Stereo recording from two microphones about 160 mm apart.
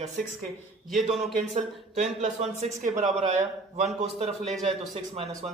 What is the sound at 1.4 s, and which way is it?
Speech, 50° right (ahead or behind).